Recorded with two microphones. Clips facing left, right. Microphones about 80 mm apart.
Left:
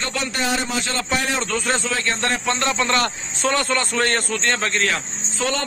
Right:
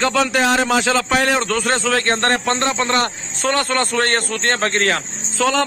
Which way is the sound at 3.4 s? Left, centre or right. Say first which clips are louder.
Right 2 dB; right.